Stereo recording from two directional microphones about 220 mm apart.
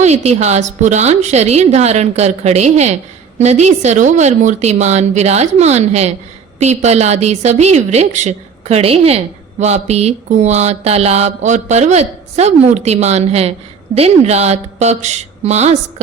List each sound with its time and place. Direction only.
0.0 s a woman's voice: 30° right (ahead or behind)